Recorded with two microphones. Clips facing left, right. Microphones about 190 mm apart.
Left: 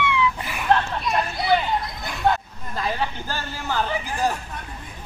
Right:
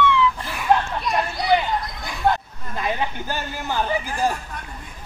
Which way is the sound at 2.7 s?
15° right (ahead or behind).